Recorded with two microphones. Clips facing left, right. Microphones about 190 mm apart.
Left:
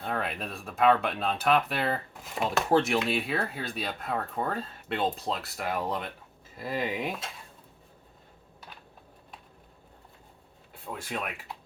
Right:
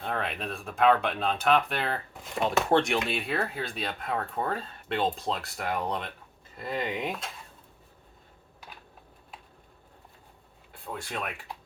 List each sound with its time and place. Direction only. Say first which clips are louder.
0.0 s speech: even; centre (ahead or behind)
10.8 s speech: even; centre (ahead or behind)